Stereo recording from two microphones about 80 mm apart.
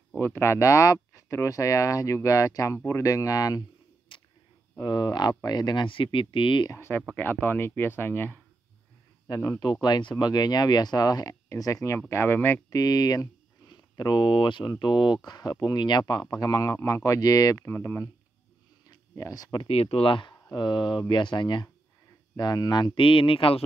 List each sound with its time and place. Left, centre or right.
0.2 s speech: left
4.1 s a sound: left
4.7 s speech: left
6.7 s speech: left
9.3 s speech: left
9.6 s speech: left
12.4 s speech: left
12.6 s speech: left
15.2 s speech: left
15.6 s speech: left
17.6 s speech: left
18.9 s a sound: left
19.6 s speech: left
22.4 s speech: left